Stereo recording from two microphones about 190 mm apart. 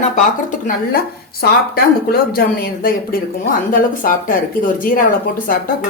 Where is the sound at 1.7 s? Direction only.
55° left (ahead or behind).